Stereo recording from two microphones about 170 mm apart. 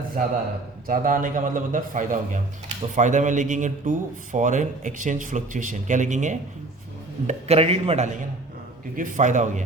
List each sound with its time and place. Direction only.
0.2 s a man's voice: 50° right (ahead or behind)
9.0 s a man's voice: 50° right (ahead or behind)